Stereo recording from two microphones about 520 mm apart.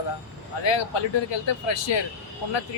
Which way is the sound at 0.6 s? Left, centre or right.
Left.